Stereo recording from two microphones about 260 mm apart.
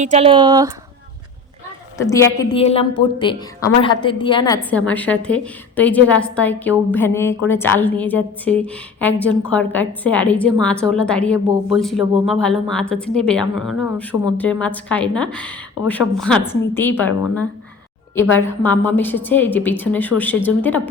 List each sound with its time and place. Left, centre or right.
0.0 s speech: right
2.0 s a woman's voice: centre